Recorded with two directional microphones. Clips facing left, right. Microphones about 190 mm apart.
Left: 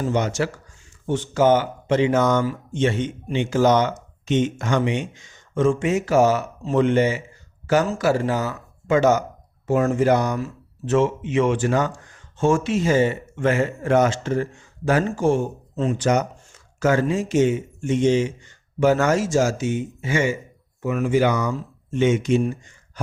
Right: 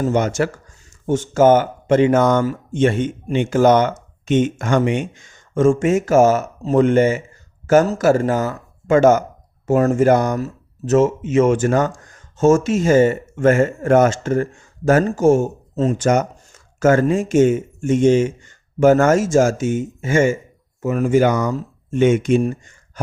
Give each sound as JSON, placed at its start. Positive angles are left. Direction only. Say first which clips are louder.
{"t": 0.0, "sound": "speech", "louder": "right 4 dB", "side_deg": -50}